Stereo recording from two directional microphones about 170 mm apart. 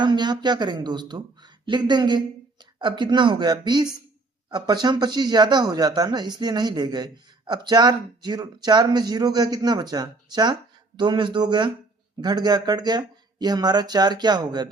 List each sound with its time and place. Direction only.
0.0 s speech: 25° right (ahead or behind)